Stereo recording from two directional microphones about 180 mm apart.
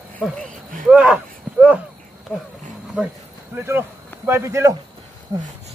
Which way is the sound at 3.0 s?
5° right (ahead or behind).